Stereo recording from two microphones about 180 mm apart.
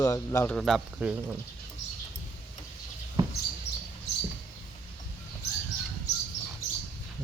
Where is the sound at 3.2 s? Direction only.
25° right (ahead or behind).